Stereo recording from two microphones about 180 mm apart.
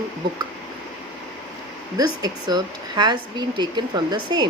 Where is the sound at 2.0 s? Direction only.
20° right (ahead or behind).